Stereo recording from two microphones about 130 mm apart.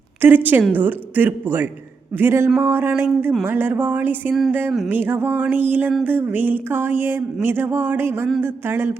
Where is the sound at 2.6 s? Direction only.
15° right (ahead or behind).